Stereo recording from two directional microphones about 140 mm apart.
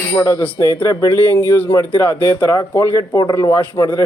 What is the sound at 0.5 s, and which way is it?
Speech, 20° left (ahead or behind).